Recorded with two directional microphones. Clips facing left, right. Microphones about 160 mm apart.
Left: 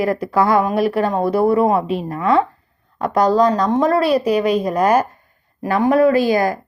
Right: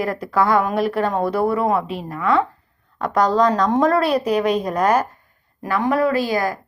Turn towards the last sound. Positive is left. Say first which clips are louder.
# left 5 dB
turn(degrees=20)  # may be behind; listen again after turning